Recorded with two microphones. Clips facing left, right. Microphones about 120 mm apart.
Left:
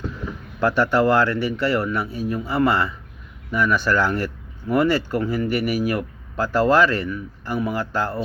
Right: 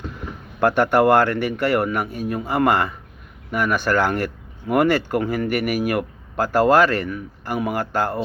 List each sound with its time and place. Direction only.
0.6 s speech: 50° right (ahead or behind)